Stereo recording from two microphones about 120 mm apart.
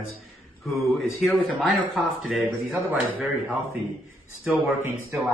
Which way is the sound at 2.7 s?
15° right (ahead or behind).